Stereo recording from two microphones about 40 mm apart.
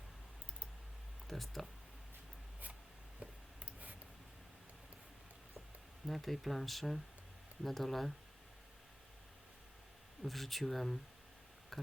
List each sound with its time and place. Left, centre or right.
1.3 s speech: centre
3.2 s a sound: right
6.1 s speech: centre
10.2 s speech: centre
11.7 s tick: centre